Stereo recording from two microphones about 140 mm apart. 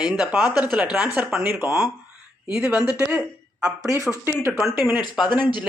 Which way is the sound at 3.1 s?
5° right (ahead or behind).